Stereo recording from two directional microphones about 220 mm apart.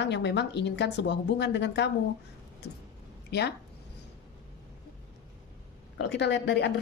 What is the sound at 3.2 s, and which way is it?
Speech, 50° left (ahead or behind).